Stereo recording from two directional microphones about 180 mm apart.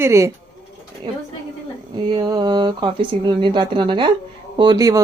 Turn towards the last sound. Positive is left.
turn(degrees=-20)  # may be behind; listen again after turning